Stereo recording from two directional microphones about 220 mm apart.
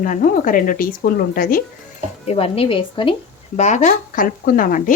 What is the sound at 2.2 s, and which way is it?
A woman's voice, 30° left (ahead or behind).